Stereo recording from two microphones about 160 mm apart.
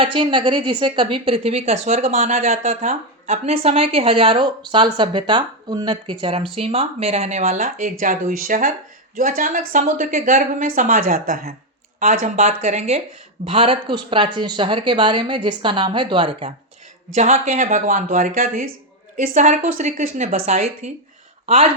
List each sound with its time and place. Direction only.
0.0 s a woman's voice: 30° right (ahead or behind); by 12.3 s 55° right (ahead or behind)
12.4 s a woman's voice: 45° right (ahead or behind)
17.2 s speech: 45° right (ahead or behind)